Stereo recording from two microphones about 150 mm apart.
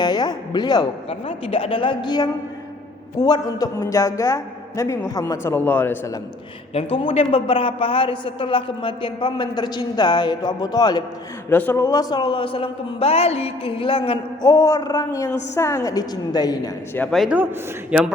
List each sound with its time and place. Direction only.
0.0 s speech: 30° left (ahead or behind)
1.5 s a woman's voice: 40° left (ahead or behind); by 6.0 s 10° left (ahead or behind)
6.7 s a woman's voice: 40° left (ahead or behind)
11.4 s a woman's voice: 15° left (ahead or behind); by 14.2 s 35° left (ahead or behind)
14.4 s speech: 20° left (ahead or behind)
17.1 s a man's voice: centre (ahead or behind)